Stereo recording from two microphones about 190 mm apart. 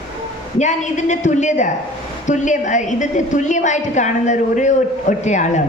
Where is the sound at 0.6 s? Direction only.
40° left (ahead or behind).